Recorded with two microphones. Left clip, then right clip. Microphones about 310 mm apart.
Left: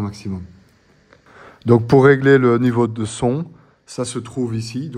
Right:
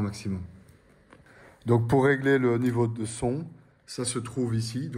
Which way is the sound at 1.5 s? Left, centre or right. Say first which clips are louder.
Left 10 dB; left.